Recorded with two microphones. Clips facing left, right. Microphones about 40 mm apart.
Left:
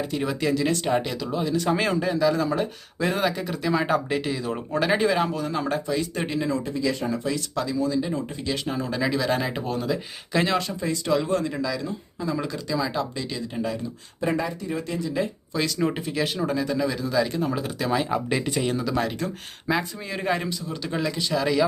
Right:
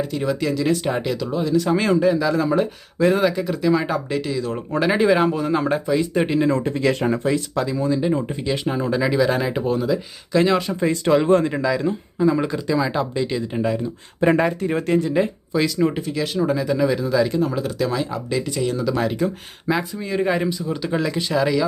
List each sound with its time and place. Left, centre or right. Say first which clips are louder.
0.0 s speech: right 3 dB; centre
4.2 s speech: right 3 dB; centre
4.5 s speech: right 3 dB; centre
5.1 s speech: right 6 dB; centre
6.5 s speech: right 6 dB; right
7.3 s speech: right 6 dB; right; by 10.6 s centre
10.8 s speech: right 6 dB; right
14.2 s speech: right 8 dB; right
15.5 s speech: right 5 dB; centre
17.9 s speech: left 1 dB; centre
18.3 s speech: right 2 dB; left
18.8 s speech: right 5 dB; centre
21.4 s speech: right 1 dB; centre